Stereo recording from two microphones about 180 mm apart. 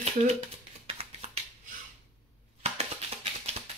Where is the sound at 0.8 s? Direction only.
35° right (ahead or behind).